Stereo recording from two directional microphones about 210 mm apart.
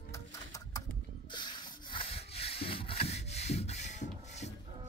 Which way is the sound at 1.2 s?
20° left (ahead or behind).